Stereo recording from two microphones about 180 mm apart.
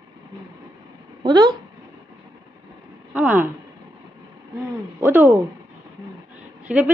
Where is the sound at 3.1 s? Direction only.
10° right (ahead or behind).